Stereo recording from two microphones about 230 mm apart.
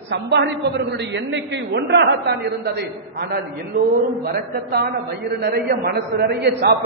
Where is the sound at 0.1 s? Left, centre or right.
Right.